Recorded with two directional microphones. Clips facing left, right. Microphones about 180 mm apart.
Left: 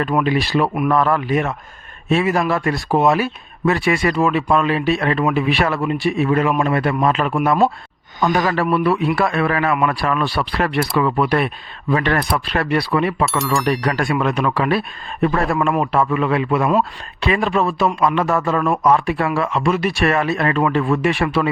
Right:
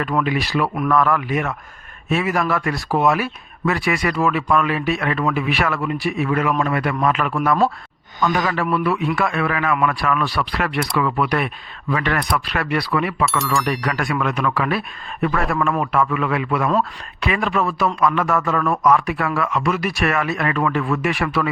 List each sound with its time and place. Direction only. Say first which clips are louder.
0.0 s a man's voice: left 3 dB; 25° left (ahead or behind)
13.2 s speech: left 1 dB; centre (ahead or behind)
13.7 s a man's voice: left 4 dB; 30° left (ahead or behind)